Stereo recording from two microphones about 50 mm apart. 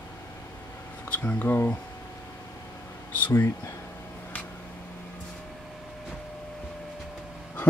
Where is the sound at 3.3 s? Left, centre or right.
Left.